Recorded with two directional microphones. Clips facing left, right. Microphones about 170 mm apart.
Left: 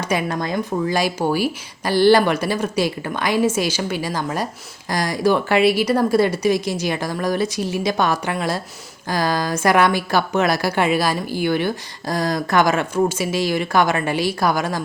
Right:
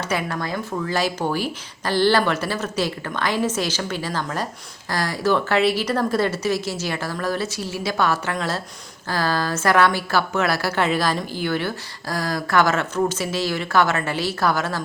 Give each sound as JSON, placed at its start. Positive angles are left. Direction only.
{"t": 0.0, "sound": "a woman's voice", "side_deg": 15}